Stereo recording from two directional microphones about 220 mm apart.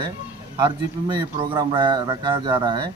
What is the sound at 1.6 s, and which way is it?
Speech, 20° right (ahead or behind).